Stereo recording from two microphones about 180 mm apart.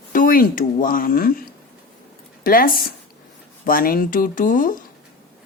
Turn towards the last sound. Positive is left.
turn(degrees=50)  # may be behind; listen again after turning